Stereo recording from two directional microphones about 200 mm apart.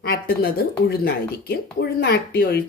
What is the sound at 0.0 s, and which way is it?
Speech, 50° left (ahead or behind).